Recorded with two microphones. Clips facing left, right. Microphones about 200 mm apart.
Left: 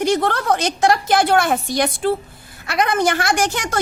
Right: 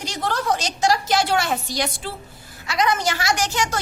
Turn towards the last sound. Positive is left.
turn(degrees=55)  # may be behind; listen again after turning